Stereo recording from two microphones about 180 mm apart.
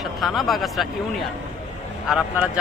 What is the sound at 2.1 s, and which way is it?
Speech, 5° right (ahead or behind).